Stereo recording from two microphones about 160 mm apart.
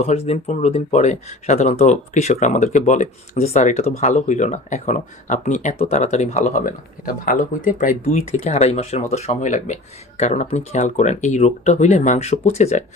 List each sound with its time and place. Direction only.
0.0 s speech: 40° left (ahead or behind)
7.0 s speech: 60° left (ahead or behind); by 12.8 s 45° left (ahead or behind)